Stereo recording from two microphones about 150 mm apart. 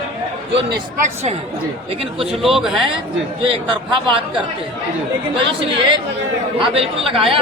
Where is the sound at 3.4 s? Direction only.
35° right (ahead or behind).